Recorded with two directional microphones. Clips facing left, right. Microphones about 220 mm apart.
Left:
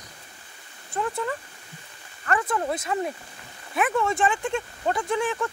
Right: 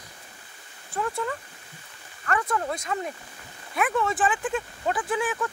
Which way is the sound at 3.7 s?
Centre (ahead or behind).